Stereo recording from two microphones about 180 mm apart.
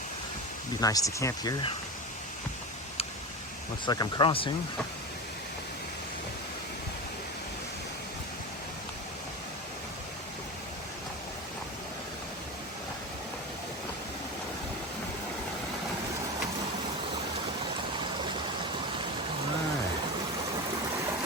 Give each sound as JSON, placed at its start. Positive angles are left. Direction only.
{"t": 0.8, "sound": "speech", "side_deg": 20}
{"t": 3.8, "sound": "speech", "side_deg": 25}